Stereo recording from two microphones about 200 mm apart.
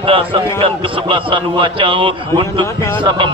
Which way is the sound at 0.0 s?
25° right (ahead or behind).